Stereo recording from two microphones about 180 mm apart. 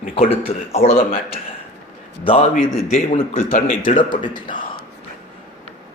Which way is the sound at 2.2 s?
30° left (ahead or behind).